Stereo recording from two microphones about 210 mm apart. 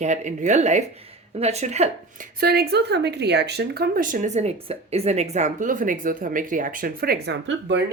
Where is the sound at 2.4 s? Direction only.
50° right (ahead or behind).